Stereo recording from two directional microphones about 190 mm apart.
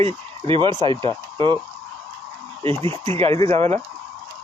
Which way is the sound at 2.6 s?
30° right (ahead or behind).